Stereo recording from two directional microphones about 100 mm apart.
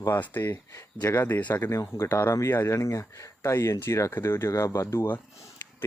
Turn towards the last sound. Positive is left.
turn(degrees=25)  # may be behind; listen again after turning